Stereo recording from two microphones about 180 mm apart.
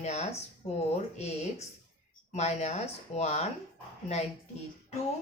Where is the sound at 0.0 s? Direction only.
40° left (ahead or behind).